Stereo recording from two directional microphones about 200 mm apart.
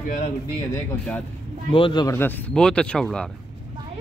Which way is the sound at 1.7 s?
25° left (ahead or behind).